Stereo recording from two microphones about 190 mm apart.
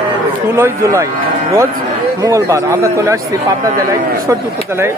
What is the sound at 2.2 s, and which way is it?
Speech, 15° right (ahead or behind).